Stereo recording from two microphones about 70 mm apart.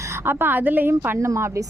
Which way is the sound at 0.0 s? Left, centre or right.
Right.